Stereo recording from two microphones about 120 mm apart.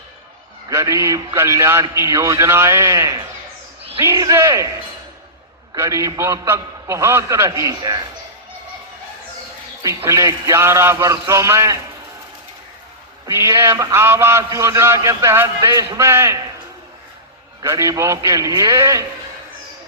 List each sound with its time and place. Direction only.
0.7 s a man's voice: 25° right (ahead or behind)
4.4 s a man's voice: 25° right (ahead or behind)
5.7 s a man's voice: 25° right (ahead or behind)
9.8 s a man's voice: 25° right (ahead or behind)
13.3 s a man's voice: 20° right (ahead or behind)
17.6 s a man's voice: 25° right (ahead or behind)